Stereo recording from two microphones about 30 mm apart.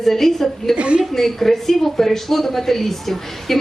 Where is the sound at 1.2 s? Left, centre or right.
Centre.